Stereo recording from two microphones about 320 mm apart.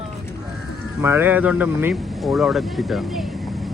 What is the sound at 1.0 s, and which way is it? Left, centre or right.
Speech, centre.